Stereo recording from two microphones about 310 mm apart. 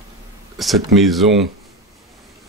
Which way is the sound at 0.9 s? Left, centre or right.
Centre.